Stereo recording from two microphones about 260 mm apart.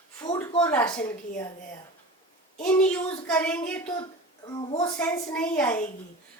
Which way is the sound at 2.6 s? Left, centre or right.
Centre.